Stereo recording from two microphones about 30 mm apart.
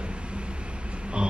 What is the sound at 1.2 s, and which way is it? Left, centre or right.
Vehicle, right.